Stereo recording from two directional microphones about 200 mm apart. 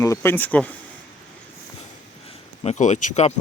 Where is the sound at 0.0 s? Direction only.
15° left (ahead or behind).